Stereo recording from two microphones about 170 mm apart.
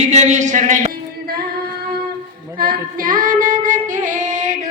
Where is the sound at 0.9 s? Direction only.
60° right (ahead or behind).